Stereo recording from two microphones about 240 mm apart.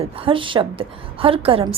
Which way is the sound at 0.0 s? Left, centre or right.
Right.